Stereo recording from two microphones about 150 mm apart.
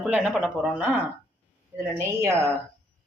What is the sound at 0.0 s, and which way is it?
Speech, 5° right (ahead or behind).